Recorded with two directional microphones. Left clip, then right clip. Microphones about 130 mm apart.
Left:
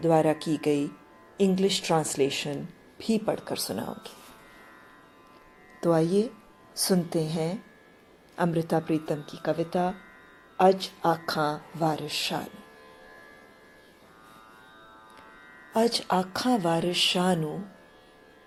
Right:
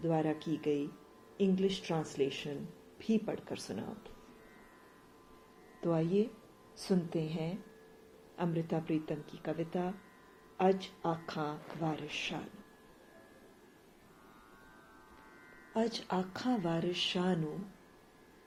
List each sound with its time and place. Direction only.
0.0 s speech: 60° left (ahead or behind)
5.8 s a woman's voice: 85° left
8.4 s speech: 75° left (ahead or behind)
15.7 s speech: 65° left (ahead or behind)